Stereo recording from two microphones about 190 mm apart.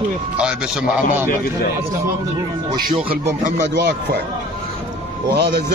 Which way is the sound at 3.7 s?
60° right (ahead or behind).